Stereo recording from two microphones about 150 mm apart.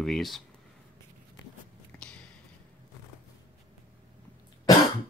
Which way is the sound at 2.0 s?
5° left (ahead or behind).